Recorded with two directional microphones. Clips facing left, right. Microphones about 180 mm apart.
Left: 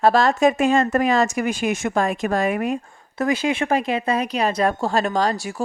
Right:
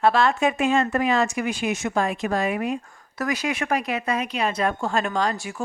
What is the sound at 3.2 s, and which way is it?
Speech, 25° left (ahead or behind).